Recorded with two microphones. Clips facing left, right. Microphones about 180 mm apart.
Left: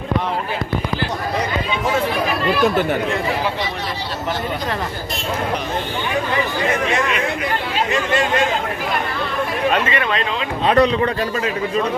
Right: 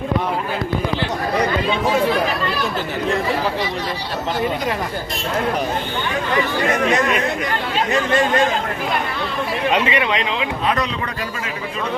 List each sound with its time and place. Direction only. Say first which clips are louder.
9.7 s speech: right 1 dB; 15° right (ahead or behind)
10.7 s a man's voice: left 10 dB; 30° left (ahead or behind)